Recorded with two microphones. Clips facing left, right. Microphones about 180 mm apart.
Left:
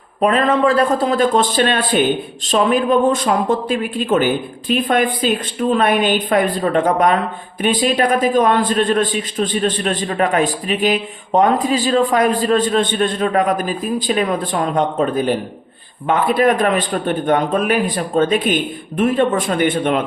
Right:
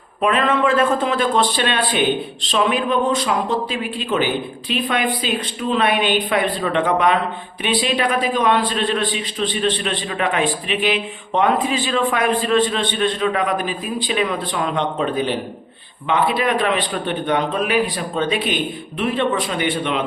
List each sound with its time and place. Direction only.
0.2 s a man's voice: 40° left (ahead or behind)